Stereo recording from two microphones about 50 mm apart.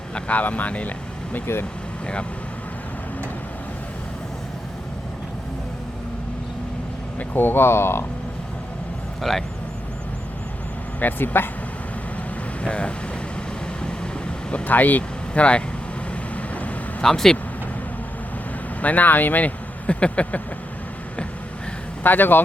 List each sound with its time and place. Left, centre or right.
0.1 s speech: left
7.3 s speech: left
11.0 s speech: left
12.6 s speech: left
13.8 s vehicle: left
14.7 s speech: left
16.3 s vehicle: left
17.0 s speech: centre
18.8 s speech: left
22.0 s speech: left